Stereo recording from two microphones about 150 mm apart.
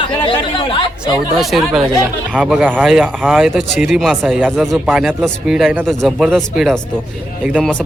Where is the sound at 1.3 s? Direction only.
Centre (ahead or behind).